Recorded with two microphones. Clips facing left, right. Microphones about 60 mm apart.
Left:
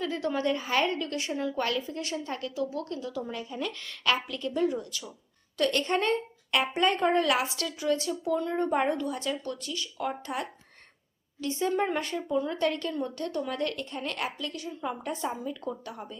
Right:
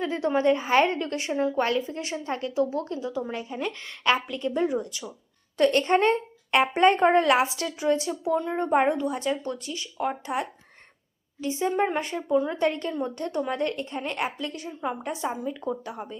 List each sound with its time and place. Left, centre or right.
0.0 s a woman's voice: right